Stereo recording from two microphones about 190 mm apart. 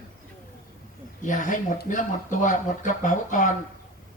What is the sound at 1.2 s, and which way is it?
Speech, 40° left (ahead or behind).